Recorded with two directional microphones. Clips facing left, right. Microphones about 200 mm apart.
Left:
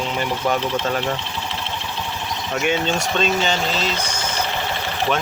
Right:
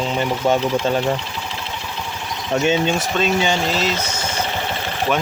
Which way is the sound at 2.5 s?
30° right (ahead or behind).